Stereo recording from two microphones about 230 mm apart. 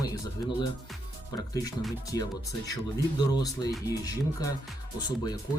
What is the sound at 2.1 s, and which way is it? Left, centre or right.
Speech, centre.